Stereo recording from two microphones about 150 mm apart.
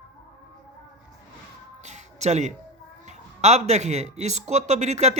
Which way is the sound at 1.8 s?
50° right (ahead or behind).